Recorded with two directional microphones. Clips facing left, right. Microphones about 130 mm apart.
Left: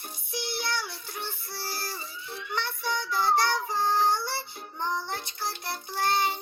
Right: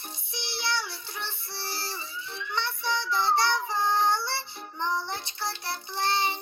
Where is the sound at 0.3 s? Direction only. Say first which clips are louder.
Left 1 dB; 50° left (ahead or behind).